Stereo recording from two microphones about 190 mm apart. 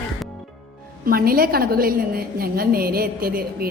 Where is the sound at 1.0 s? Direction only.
50° right (ahead or behind).